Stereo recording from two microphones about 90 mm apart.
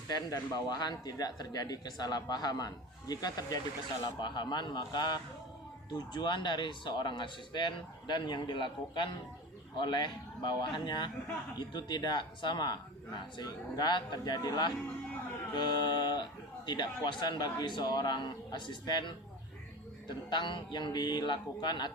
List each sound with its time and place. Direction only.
0.1 s speech: 45° left (ahead or behind)